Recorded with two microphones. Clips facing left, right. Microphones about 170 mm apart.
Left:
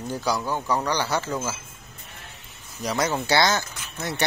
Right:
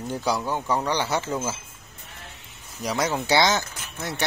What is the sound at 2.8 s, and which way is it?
Speech, 10° right (ahead or behind).